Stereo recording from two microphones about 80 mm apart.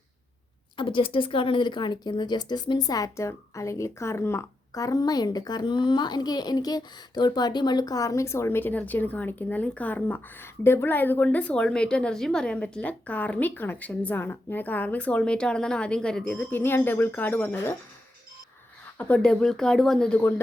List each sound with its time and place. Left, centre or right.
0.8 s a woman's voice: left
18.9 s speech: left
19.2 s speech: centre